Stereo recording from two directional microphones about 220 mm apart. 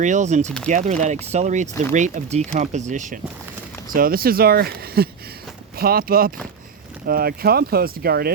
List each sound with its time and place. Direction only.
0.0 s speech: 35° right (ahead or behind)